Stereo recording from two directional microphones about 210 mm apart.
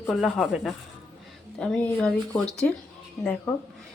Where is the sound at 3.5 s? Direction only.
5° left (ahead or behind).